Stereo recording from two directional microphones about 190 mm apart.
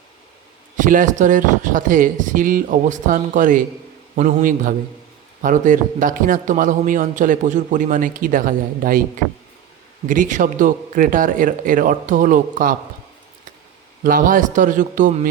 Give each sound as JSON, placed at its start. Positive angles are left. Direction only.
{"t": 0.8, "sound": "a man's voice", "side_deg": -45}
{"t": 10.1, "sound": "a man's voice", "side_deg": -40}
{"t": 14.0, "sound": "a man's voice", "side_deg": -45}